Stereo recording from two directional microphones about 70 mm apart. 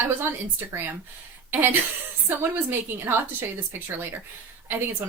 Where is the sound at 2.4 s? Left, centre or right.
Right.